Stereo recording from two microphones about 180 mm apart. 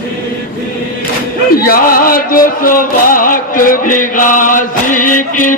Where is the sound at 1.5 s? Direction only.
55° left (ahead or behind).